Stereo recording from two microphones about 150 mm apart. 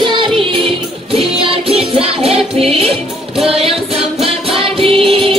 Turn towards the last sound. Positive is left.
turn(degrees=-40)  # may be behind; listen again after turning